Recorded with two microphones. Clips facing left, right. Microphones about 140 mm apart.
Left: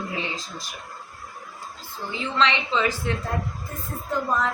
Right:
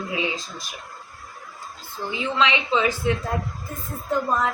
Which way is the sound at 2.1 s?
15° right (ahead or behind).